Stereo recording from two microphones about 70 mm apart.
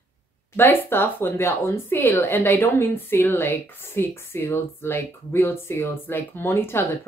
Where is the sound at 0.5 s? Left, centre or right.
Left.